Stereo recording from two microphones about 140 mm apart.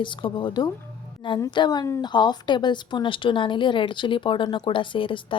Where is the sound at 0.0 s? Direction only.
35° left (ahead or behind).